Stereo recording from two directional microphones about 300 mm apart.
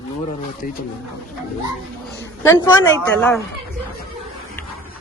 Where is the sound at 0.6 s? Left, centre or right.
Left.